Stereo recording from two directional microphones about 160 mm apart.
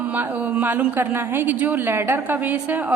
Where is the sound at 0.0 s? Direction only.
10° right (ahead or behind).